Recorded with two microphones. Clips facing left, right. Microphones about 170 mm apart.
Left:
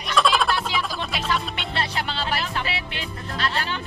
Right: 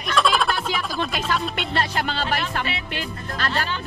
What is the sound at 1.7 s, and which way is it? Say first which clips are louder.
Speech: right 2 dB; 45° right (ahead or behind).